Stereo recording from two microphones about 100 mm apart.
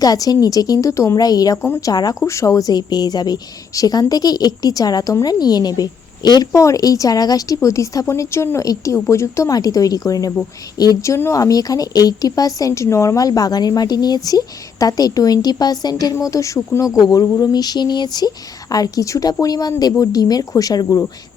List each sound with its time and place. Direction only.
0.0 s speech: 40° left (ahead or behind)
16.6 s speech: 15° left (ahead or behind)
16.8 s speech: 40° left (ahead or behind)
17.2 s a sound: 35° left (ahead or behind)
18.7 s speech: 35° left (ahead or behind)